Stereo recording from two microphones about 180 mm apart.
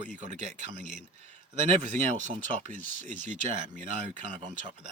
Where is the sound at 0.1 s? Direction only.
40° right (ahead or behind).